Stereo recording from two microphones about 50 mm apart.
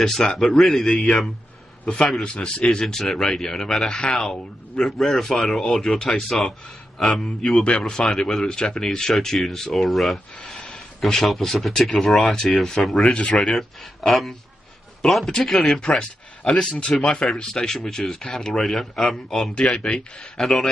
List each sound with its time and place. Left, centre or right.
0.0 s speech: centre
2.2 s speech: centre
7.6 s speech: centre
8.5 s speech: centre
13.0 s speech: left
13.5 s speech: centre
16.0 s speech: centre
19.5 s speech: centre